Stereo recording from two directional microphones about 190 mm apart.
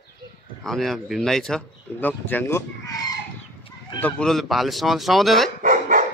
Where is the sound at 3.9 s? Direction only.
5° left (ahead or behind).